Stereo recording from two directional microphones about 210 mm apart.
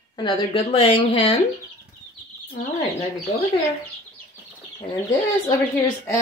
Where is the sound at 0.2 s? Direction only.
25° left (ahead or behind).